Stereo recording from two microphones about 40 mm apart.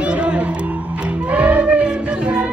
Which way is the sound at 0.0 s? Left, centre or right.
Right.